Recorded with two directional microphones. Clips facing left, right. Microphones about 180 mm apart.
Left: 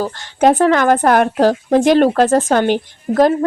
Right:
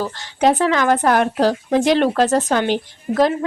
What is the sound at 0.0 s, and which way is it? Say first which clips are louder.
A woman's voice: left 3 dB; 50° left (ahead or behind).